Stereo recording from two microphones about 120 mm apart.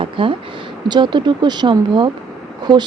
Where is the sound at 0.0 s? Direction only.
45° right (ahead or behind).